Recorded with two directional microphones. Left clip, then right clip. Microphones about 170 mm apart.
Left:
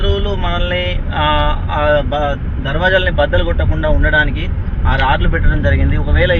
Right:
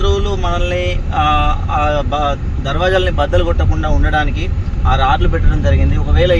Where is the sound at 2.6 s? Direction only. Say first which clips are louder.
Left 1 dB; 35° right (ahead or behind).